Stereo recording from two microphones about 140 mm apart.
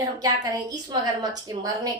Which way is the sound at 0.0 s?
25° right (ahead or behind).